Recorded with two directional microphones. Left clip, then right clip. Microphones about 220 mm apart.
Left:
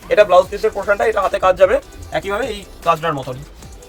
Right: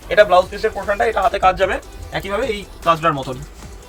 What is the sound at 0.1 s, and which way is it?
Speech, 40° left (ahead or behind).